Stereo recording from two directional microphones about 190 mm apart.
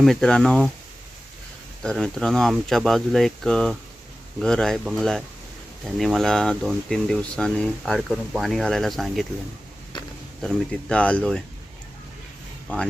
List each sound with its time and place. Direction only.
0.0 s speech: centre (ahead or behind)
1.8 s speech: 5° left (ahead or behind)
9.9 s a sound: 25° left (ahead or behind)
10.4 s speech: 5° left (ahead or behind)
12.6 s speech: 5° left (ahead or behind)